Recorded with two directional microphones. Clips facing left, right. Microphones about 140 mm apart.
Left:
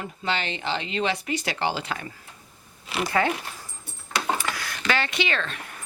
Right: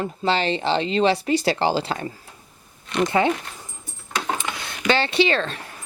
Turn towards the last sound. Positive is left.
turn(degrees=-35)  # may be behind; listen again after turning